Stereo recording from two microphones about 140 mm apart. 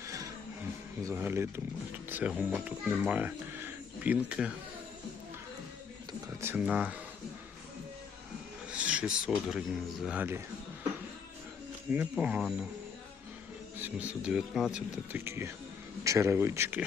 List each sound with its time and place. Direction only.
0.0 s music: 20° right (ahead or behind)
1.0 s speech: 15° right (ahead or behind)
6.4 s speech: 15° right (ahead or behind)
8.7 s speech: 10° right (ahead or behind)
12.1 s speech: 5° right (ahead or behind)
13.7 s speech: 10° right (ahead or behind)
15.1 s speech: 20° right (ahead or behind)